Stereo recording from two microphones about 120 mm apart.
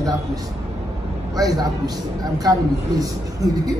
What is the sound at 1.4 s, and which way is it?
A man's voice, 30° right (ahead or behind).